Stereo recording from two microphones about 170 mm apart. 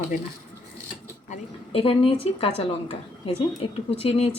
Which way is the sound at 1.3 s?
35° left (ahead or behind).